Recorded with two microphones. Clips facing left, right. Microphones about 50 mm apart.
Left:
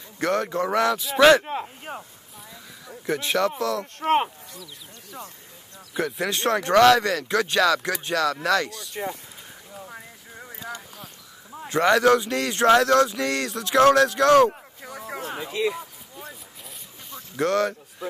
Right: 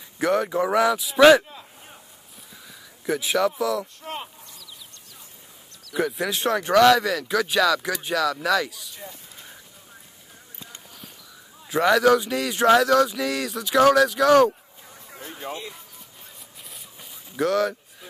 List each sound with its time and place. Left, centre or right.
0.2 s speech: centre
1.4 s speech: left
1.8 s a sound: left
3.1 s speech: centre
3.8 s speech: left
5.9 s speech: centre
11.7 s speech: centre
14.5 s a sound: left
17.1 s a sound: centre